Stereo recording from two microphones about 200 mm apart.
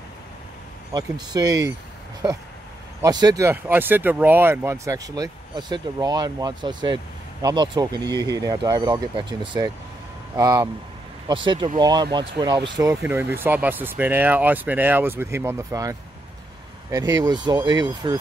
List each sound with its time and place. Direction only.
0.9 s speech: 20° right (ahead or behind)
12.9 s speech: 10° right (ahead or behind)
17.1 s speech: 20° right (ahead or behind)